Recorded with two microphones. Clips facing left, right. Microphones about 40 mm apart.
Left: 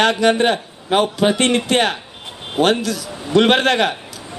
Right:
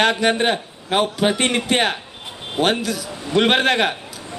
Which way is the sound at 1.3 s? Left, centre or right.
Centre.